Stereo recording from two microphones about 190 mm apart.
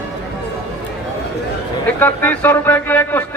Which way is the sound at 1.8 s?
10° left (ahead or behind).